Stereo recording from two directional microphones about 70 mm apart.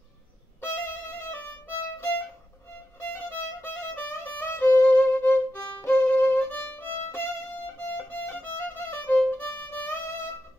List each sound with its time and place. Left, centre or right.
0.6 s violin: left
3.3 s music: left